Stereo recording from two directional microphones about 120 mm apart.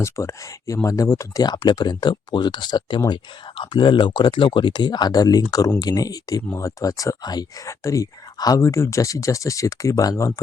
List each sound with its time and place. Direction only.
0.0 s speech: 25° left (ahead or behind)